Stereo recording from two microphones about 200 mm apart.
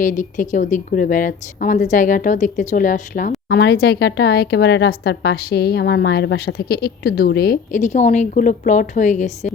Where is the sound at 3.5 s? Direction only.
55° left (ahead or behind).